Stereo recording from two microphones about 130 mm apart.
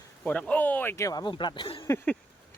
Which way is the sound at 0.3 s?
10° left (ahead or behind).